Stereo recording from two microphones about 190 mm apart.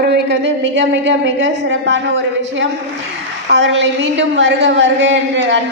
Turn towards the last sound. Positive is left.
turn(degrees=-75)  # may be behind; listen again after turning